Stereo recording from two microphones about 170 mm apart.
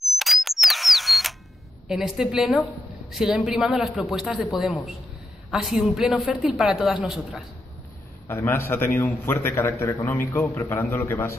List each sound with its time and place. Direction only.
0.0 s camera: centre (ahead or behind)
1.9 s speech: centre (ahead or behind)
8.3 s a man's voice: 15° left (ahead or behind)